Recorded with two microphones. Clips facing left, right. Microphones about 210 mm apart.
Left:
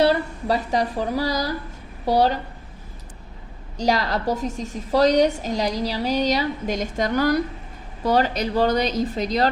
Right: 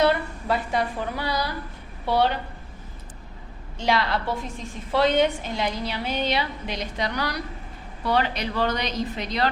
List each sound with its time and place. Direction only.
0.0 s a woman's voice: 35° left (ahead or behind)
3.8 s a woman's voice: 40° left (ahead or behind)